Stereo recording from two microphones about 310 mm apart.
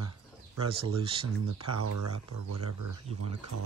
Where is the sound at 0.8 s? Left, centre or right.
Centre.